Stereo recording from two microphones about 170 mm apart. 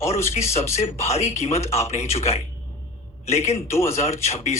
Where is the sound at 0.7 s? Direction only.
40° left (ahead or behind).